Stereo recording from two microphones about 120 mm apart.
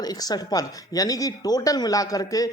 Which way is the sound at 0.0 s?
30° left (ahead or behind).